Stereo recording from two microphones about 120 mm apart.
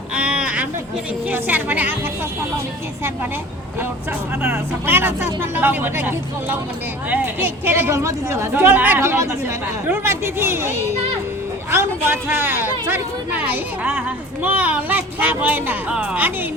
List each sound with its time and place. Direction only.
0.1 s a sound: 10° right (ahead or behind)
1.3 s a child's voice: 15° right (ahead or behind)
4.9 s a child's voice: 15° right (ahead or behind)